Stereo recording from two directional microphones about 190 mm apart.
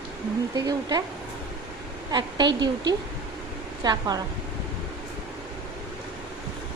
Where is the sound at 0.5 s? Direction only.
20° right (ahead or behind).